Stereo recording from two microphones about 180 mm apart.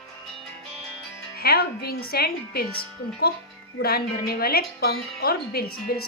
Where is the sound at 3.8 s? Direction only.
60° left (ahead or behind).